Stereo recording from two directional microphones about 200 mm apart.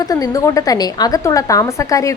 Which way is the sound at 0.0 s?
20° left (ahead or behind).